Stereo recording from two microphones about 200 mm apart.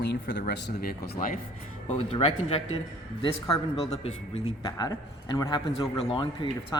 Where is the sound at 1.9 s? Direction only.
30° left (ahead or behind).